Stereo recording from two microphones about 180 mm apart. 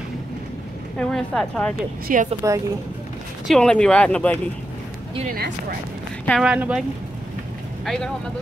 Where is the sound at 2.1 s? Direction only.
50° right (ahead or behind).